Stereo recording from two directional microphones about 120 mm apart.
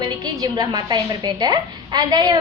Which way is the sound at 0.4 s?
30° right (ahead or behind).